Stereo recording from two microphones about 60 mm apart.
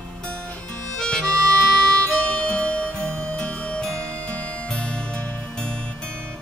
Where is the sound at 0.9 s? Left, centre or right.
Centre.